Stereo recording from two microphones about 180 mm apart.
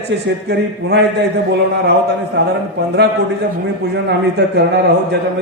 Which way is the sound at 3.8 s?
65° right (ahead or behind).